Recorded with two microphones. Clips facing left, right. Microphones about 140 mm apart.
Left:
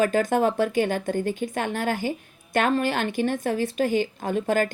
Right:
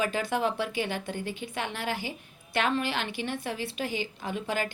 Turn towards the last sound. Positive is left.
turn(degrees=45)  # may be behind; listen again after turning